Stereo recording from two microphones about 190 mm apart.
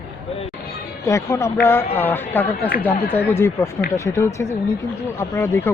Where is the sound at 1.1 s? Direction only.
15° left (ahead or behind).